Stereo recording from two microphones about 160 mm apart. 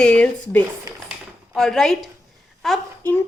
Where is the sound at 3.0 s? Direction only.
10° left (ahead or behind).